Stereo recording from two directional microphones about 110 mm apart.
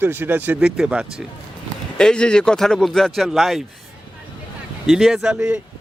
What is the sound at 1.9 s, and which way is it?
Speech, 10° left (ahead or behind).